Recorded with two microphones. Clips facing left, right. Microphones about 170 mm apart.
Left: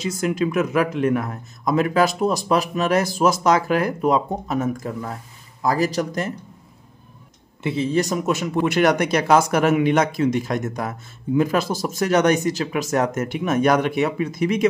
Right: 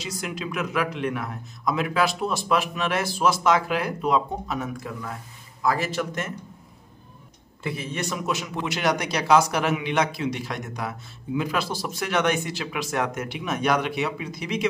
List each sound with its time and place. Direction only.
0.0 s a man's voice: 50° left (ahead or behind)
7.6 s speech: 30° left (ahead or behind); by 14.7 s 50° left (ahead or behind)